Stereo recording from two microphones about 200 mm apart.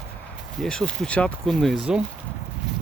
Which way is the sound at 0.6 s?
5° left (ahead or behind).